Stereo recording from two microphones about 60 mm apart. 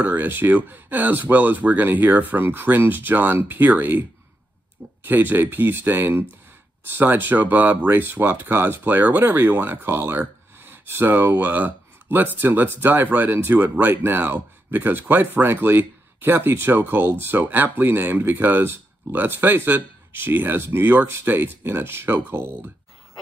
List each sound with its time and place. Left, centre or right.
0.0 s speech: right
5.0 s speech: right